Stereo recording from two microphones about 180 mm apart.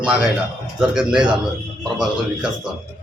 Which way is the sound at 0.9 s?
5° right (ahead or behind).